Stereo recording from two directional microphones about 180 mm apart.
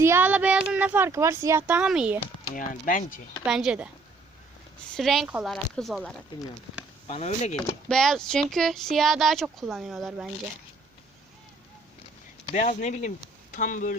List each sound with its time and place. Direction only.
0.0 s speech: 10° right (ahead or behind)
2.6 s speech: 50° left (ahead or behind)
3.4 s speech: 5° right (ahead or behind)
4.9 s speech: centre (ahead or behind)
7.1 s speech: 35° left (ahead or behind)
7.5 s speech: 5° left (ahead or behind)
12.5 s speech: 40° left (ahead or behind)